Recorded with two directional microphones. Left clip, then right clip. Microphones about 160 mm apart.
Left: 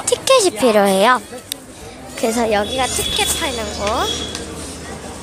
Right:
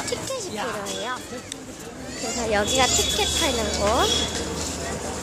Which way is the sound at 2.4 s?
25° left (ahead or behind).